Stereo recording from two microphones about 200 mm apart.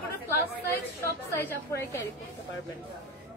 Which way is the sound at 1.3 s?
15° left (ahead or behind).